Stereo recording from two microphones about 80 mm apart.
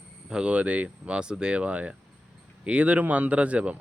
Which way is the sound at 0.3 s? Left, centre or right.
Centre.